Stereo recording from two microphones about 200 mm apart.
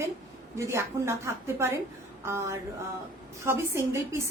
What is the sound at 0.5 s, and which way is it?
Speech, 15° right (ahead or behind).